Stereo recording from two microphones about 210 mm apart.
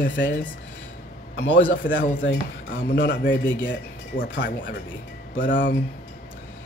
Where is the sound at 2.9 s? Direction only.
45° left (ahead or behind).